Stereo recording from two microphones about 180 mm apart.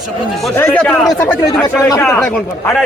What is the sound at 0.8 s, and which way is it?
Speech, centre (ahead or behind).